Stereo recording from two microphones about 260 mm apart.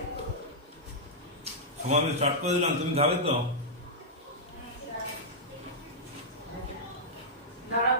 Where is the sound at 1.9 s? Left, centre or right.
Right.